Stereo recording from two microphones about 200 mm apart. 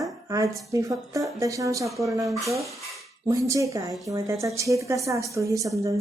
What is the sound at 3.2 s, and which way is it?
A woman's voice, 15° right (ahead or behind).